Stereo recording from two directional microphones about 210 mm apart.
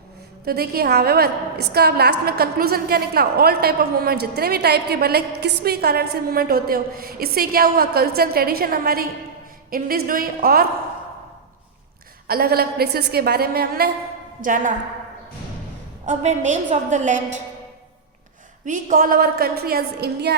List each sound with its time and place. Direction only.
0.4 s a woman's voice: 45° right (ahead or behind)
12.3 s a woman's voice: 45° right (ahead or behind)
16.0 s a woman's voice: 35° right (ahead or behind)
18.6 s a woman's voice: 35° right (ahead or behind)